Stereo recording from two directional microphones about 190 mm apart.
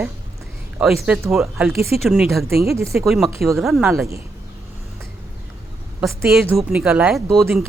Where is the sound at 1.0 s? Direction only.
5° right (ahead or behind).